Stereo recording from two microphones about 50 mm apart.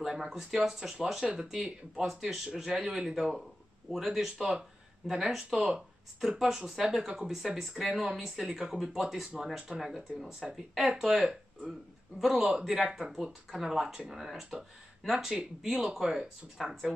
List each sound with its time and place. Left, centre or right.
0.0 s speech: centre
1.5 s speech: centre